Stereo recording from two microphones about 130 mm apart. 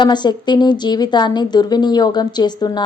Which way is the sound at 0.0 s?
35° left (ahead or behind).